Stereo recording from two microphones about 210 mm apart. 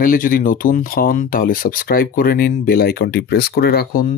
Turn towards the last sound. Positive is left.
turn(degrees=40)  # may be behind; listen again after turning